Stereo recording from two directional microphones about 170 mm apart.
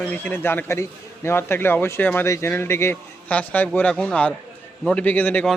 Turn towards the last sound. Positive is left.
turn(degrees=10)  # may be behind; listen again after turning